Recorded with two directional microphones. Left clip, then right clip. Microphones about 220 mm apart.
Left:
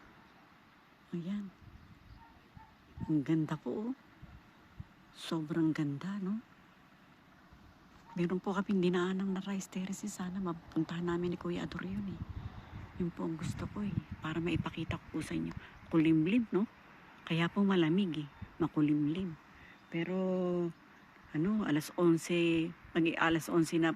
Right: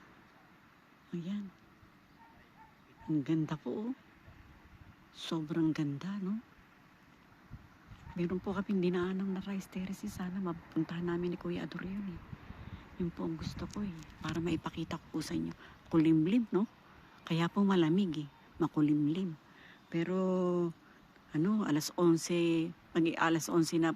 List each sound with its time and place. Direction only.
1.1 s speech: 5° left (ahead or behind)
3.1 s speech: 5° left (ahead or behind)
5.2 s speech: 5° left (ahead or behind)
8.1 s speech: 5° left (ahead or behind)
13.0 s speech: centre (ahead or behind)
19.9 s a sound: 15° right (ahead or behind)
21.3 s speech: 10° right (ahead or behind)